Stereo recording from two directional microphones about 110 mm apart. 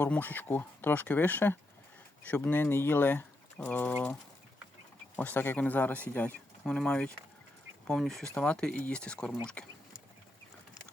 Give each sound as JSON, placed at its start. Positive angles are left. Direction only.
{"t": 0.0, "sound": "speech", "side_deg": 15}